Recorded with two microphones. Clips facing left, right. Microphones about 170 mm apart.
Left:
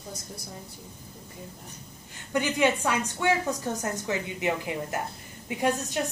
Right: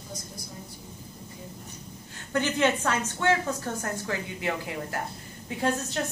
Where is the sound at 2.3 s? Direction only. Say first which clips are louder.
Even; 15° left (ahead or behind).